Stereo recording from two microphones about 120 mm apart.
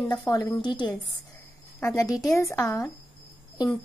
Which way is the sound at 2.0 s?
30° left (ahead or behind).